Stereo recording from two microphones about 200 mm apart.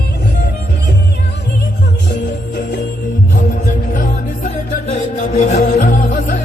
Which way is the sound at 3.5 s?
40° left (ahead or behind).